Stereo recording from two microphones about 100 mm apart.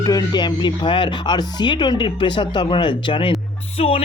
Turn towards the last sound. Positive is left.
turn(degrees=80)